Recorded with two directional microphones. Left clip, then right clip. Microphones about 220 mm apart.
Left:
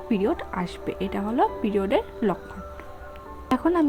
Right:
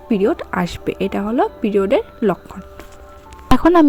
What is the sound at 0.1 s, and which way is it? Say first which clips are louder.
A woman's voice: right 8 dB; 25° right (ahead or behind).